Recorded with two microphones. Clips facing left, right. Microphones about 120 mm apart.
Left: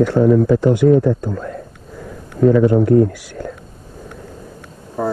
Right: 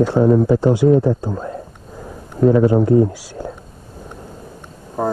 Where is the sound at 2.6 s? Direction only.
15° right (ahead or behind).